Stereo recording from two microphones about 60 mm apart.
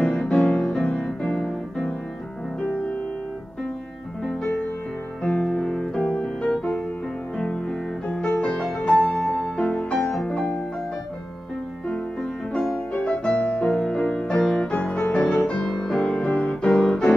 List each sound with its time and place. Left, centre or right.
0.0 s music: centre
2.7 s music: left
4.2 s music: centre
8.5 s music: centre
8.9 s music: left
11.9 s music: centre